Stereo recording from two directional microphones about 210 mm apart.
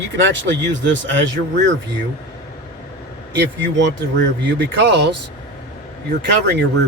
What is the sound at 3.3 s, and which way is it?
Speech, 60° right (ahead or behind).